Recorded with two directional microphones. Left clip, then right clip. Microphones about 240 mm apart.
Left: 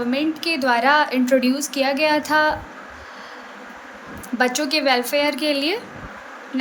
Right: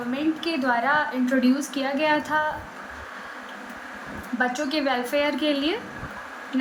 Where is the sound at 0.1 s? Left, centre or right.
Left.